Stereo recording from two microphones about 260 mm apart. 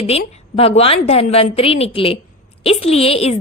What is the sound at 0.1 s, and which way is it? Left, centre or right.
A woman's voice, left.